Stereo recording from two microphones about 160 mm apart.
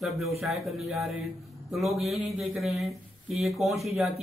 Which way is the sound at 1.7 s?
Centre (ahead or behind).